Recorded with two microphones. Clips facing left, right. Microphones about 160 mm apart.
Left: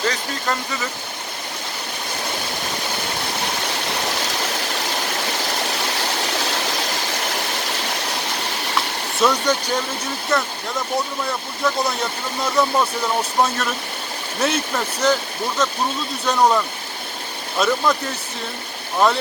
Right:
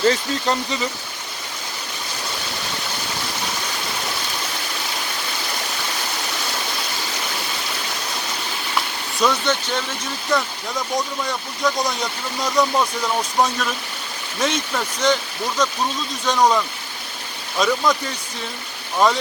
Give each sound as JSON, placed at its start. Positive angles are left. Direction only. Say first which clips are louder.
{"t": 0.0, "sound": "speech", "louder": "right 5 dB", "side_deg": -25}
{"t": 9.2, "sound": "speech", "louder": "left 1 dB", "side_deg": 10}
{"t": 18.9, "sound": "speech", "louder": "even", "side_deg": 0}